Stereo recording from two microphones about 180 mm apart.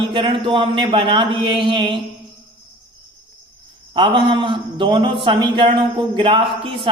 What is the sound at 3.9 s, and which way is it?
A man's voice, 25° right (ahead or behind).